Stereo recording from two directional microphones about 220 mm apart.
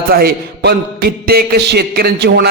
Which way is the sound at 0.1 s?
45° right (ahead or behind).